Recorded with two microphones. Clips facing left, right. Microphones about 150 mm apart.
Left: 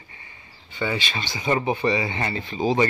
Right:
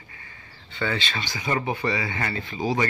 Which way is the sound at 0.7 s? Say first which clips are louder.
Left 1 dB; 15° left (ahead or behind).